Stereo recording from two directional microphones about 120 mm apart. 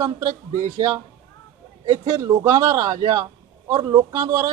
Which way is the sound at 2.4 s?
30° right (ahead or behind).